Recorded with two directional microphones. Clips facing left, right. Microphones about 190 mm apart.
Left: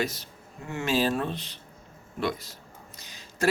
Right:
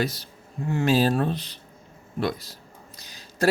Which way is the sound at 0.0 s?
35° right (ahead or behind).